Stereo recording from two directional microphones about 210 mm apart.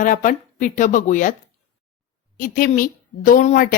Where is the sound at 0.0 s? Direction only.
40° left (ahead or behind).